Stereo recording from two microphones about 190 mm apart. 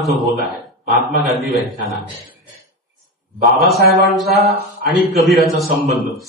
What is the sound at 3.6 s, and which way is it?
Speech, centre (ahead or behind).